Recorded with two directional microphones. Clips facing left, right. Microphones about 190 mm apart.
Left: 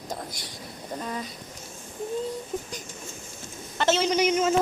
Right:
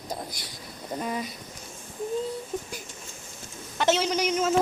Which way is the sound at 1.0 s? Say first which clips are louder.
Right 3 dB; 10° right (ahead or behind).